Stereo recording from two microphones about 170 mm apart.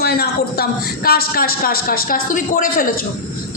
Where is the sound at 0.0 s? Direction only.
65° left (ahead or behind).